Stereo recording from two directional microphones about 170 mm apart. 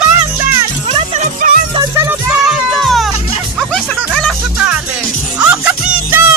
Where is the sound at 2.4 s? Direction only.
Centre (ahead or behind).